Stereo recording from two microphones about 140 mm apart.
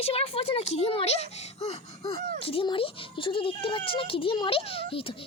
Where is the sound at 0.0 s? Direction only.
45° left (ahead or behind).